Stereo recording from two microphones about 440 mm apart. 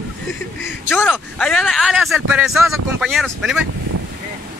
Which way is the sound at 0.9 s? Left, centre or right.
Centre.